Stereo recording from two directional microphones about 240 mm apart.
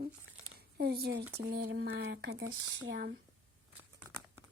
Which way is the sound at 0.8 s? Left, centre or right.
Right.